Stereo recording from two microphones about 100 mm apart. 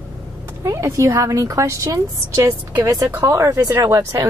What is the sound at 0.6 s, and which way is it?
Speech, 30° right (ahead or behind).